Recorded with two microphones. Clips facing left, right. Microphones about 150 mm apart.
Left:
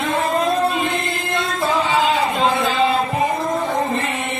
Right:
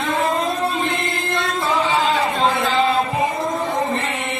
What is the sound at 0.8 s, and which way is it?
Music, 25° right (ahead or behind).